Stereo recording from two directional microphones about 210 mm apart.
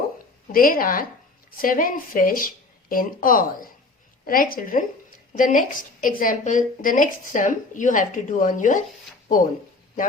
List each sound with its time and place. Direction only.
0.5 s a woman's voice: 40° left (ahead or behind)